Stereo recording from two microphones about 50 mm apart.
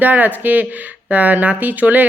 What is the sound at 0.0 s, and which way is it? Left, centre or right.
A woman's voice, right.